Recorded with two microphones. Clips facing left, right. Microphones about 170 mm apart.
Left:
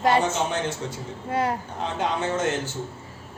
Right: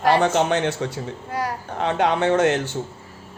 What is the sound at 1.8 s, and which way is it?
Speech, 70° right (ahead or behind).